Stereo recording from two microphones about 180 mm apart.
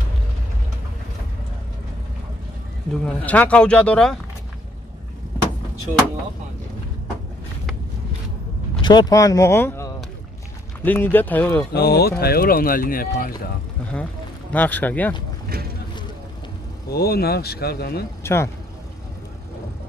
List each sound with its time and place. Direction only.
2.9 s speech: 5° left (ahead or behind)
8.8 s speech: 20° left (ahead or behind)
11.7 s speech: 60° left (ahead or behind)
14.5 s speech: 10° left (ahead or behind)
16.9 s speech: 60° left (ahead or behind)
18.2 s speech: 15° left (ahead or behind)